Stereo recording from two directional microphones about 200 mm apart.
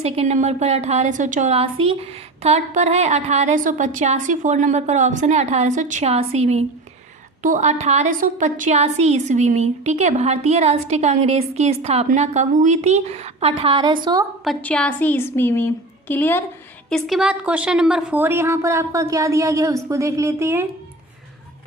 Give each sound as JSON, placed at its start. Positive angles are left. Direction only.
{"t": 0.0, "sound": "a woman's voice", "side_deg": -30}
{"t": 14.4, "sound": "a woman's voice", "side_deg": 5}
{"t": 16.9, "sound": "a woman's voice", "side_deg": 0}